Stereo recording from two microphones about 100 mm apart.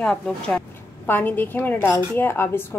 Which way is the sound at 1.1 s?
20° left (ahead or behind).